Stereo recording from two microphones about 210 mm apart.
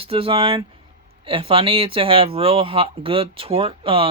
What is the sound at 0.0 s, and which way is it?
Speech, 25° right (ahead or behind).